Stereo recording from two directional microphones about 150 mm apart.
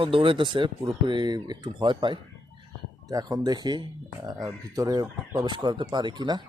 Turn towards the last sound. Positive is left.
turn(degrees=-30)  # may be behind; listen again after turning